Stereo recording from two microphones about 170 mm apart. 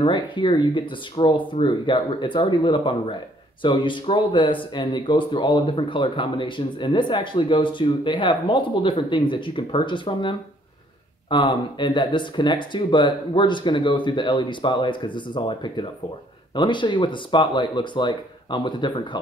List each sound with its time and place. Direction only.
0.0 s speech: 30° left (ahead or behind)